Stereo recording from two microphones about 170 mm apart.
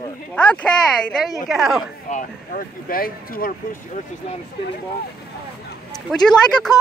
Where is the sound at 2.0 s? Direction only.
50° left (ahead or behind).